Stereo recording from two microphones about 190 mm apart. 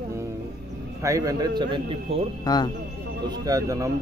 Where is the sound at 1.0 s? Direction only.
15° right (ahead or behind).